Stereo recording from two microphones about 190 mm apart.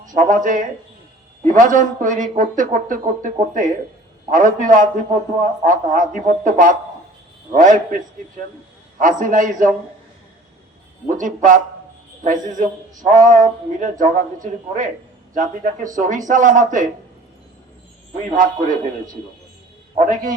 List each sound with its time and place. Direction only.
0.1 s a man's voice: 40° right (ahead or behind)
9.0 s a man's voice: 45° right (ahead or behind)
11.0 s a man's voice: 40° right (ahead or behind)
20.0 s a man's voice: 40° right (ahead or behind)